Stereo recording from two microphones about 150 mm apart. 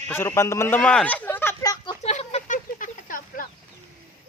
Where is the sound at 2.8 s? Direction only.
60° left (ahead or behind).